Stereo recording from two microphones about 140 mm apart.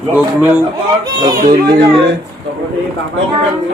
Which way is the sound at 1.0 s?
30° right (ahead or behind).